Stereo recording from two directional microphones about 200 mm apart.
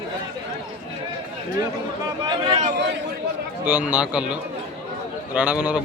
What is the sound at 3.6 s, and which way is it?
A man's voice, 5° right (ahead or behind).